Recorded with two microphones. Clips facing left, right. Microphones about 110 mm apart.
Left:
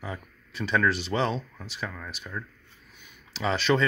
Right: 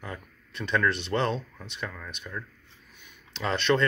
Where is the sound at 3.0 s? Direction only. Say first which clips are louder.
Left 2 dB; centre (ahead or behind).